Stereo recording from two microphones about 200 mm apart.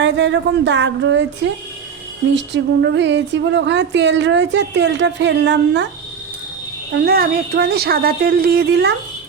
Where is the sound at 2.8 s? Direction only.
65° right (ahead or behind).